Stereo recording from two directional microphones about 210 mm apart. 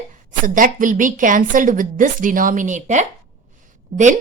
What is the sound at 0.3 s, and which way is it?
A woman's voice, 40° right (ahead or behind).